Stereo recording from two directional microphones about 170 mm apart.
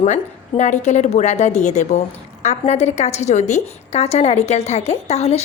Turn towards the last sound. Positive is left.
turn(degrees=40)  # may be behind; listen again after turning